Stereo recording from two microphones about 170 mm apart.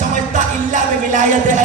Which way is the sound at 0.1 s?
50° right (ahead or behind).